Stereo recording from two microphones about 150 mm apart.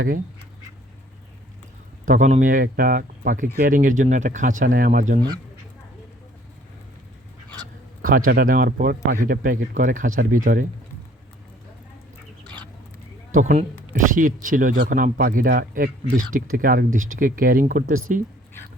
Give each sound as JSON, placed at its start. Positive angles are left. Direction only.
{"t": 2.0, "sound": "speech", "side_deg": -55}
{"t": 8.0, "sound": "speech", "side_deg": -70}
{"t": 13.3, "sound": "speech", "side_deg": -65}